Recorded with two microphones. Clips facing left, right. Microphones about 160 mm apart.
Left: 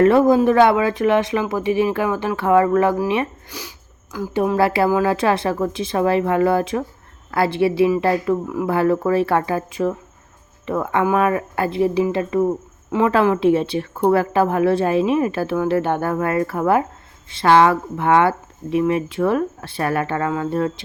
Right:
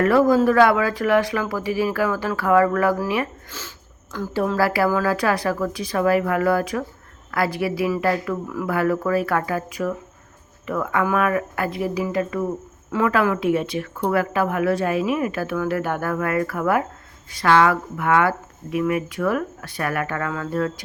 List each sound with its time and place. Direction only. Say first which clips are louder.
0.0 s speech: left 3 dB; 25° left (ahead or behind)